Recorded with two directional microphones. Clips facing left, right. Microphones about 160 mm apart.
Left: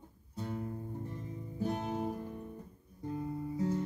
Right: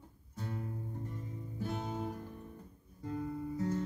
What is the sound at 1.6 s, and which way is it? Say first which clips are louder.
Music: left 4 dB; 15° left (ahead or behind).